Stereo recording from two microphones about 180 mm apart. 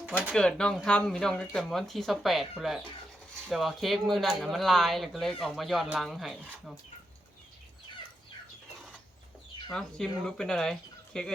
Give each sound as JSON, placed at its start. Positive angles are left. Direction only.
{"t": 0.3, "sound": "speech", "side_deg": 5}
{"t": 9.7, "sound": "speech", "side_deg": 5}